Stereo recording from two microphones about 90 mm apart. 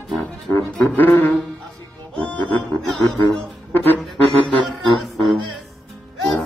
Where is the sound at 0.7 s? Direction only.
20° left (ahead or behind).